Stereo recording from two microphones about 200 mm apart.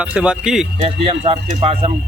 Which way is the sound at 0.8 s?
30° right (ahead or behind).